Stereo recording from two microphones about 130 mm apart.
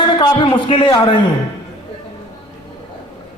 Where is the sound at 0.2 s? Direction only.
40° left (ahead or behind).